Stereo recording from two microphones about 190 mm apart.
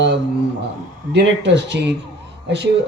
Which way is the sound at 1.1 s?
70° right (ahead or behind).